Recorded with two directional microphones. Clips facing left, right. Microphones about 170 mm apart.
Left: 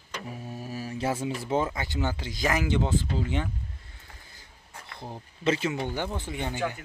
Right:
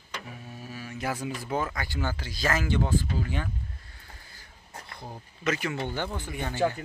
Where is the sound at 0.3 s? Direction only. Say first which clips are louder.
Left 5 dB; 35° left (ahead or behind).